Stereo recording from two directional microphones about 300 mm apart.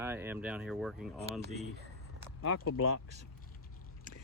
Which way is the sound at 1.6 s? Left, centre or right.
Right.